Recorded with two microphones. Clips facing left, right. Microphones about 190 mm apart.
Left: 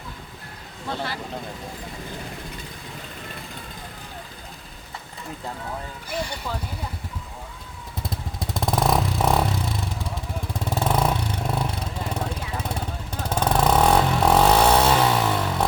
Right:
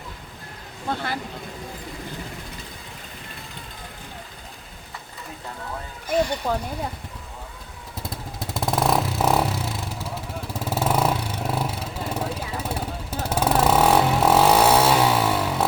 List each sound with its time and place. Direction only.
0.9 s speech: 50° right (ahead or behind)
6.4 s speech: 45° right (ahead or behind)
8.0 s motorcycle: centre (ahead or behind)
10.5 s vehicle: 5° right (ahead or behind)